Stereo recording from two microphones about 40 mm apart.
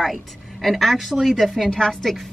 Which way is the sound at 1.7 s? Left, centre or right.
Centre.